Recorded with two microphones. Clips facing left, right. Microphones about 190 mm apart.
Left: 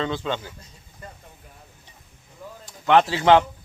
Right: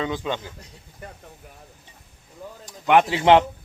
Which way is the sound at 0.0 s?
15° right (ahead or behind).